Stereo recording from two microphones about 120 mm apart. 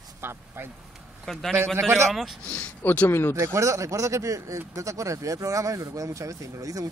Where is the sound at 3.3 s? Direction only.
25° right (ahead or behind).